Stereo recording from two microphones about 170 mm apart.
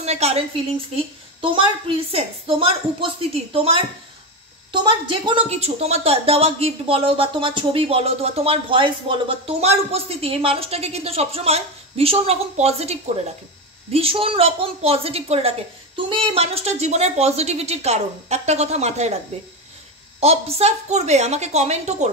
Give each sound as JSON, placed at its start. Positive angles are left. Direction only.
{"t": 0.0, "sound": "a woman's voice", "side_deg": -40}
{"t": 4.8, "sound": "a woman's voice", "side_deg": -30}
{"t": 20.2, "sound": "a woman's voice", "side_deg": -35}